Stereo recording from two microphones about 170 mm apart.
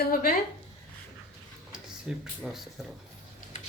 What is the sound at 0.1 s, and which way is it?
Speech, 60° left (ahead or behind).